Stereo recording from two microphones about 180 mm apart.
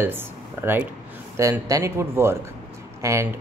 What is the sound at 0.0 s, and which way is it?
Speech, 10° right (ahead or behind).